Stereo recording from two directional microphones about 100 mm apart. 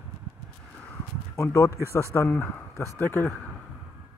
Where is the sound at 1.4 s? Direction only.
30° left (ahead or behind).